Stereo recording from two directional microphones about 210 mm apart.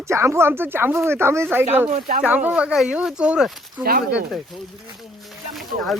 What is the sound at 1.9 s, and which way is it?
Speech, 40° right (ahead or behind).